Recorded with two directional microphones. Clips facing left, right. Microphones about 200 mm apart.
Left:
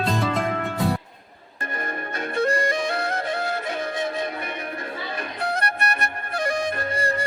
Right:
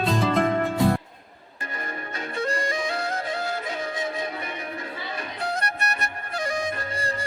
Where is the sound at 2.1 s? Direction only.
55° left (ahead or behind).